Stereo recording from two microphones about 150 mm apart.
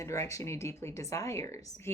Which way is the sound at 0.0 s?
20° left (ahead or behind).